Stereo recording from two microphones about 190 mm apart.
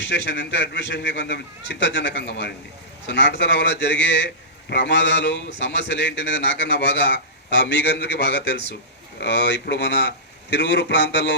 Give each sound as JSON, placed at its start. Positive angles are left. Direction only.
{"t": 0.0, "sound": "a man's voice", "side_deg": 70}